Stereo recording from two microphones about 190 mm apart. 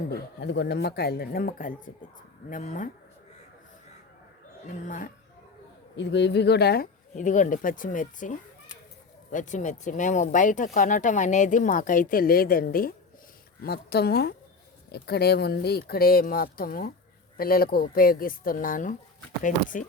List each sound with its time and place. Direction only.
0.1 s speech: 65° left (ahead or behind); by 2.9 s 40° left (ahead or behind)
4.7 s a woman's voice: 40° left (ahead or behind)
6.0 s speech: 65° left (ahead or behind)
7.2 s a woman's voice: 40° left (ahead or behind)